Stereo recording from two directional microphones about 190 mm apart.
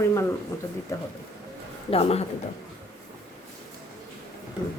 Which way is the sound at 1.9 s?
30° left (ahead or behind).